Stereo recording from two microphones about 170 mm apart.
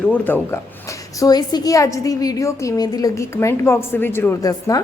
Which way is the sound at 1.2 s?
25° left (ahead or behind).